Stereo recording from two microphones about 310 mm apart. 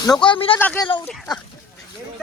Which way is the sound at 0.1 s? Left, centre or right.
Centre.